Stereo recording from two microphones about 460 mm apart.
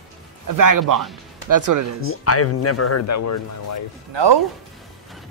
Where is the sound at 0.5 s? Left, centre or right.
Right.